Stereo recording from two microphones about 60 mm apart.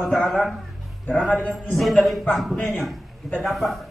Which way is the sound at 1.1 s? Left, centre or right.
Left.